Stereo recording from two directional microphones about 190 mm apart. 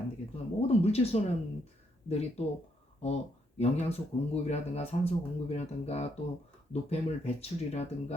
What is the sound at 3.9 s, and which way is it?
Speech, 35° left (ahead or behind).